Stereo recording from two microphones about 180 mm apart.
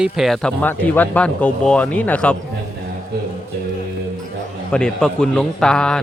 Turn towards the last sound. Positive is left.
turn(degrees=5)  # may be behind; listen again after turning